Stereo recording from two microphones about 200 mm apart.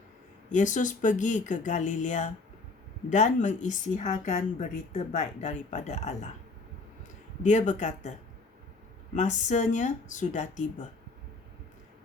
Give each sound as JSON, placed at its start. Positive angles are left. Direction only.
{"t": 0.5, "sound": "speech", "side_deg": 40}
{"t": 7.4, "sound": "speech", "side_deg": 35}
{"t": 9.1, "sound": "speech", "side_deg": 35}